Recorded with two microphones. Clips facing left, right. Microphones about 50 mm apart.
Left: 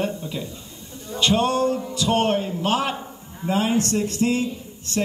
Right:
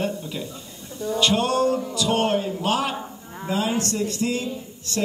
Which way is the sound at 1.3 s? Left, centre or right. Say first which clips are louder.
Left 2 dB; left.